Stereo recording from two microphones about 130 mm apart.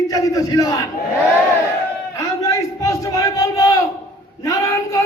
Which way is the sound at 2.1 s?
25° left (ahead or behind).